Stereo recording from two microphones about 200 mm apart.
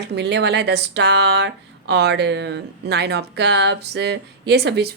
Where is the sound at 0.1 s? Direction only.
60° right (ahead or behind).